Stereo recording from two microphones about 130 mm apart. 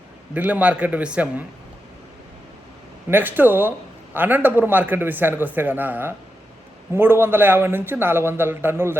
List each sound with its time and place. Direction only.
0.3 s a man's voice: 10° right (ahead or behind)
3.1 s a man's voice: 15° right (ahead or behind)